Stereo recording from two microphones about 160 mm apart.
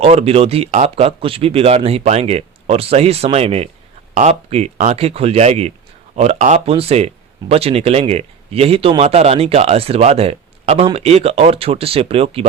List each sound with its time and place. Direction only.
0.0 s speech: 40° right (ahead or behind)